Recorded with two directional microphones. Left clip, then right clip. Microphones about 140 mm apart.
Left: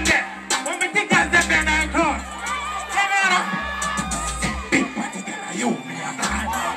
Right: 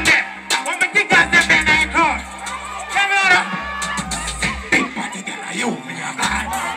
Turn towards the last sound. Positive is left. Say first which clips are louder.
# right 5 dB
turn(degrees=-25)  # may be behind; listen again after turning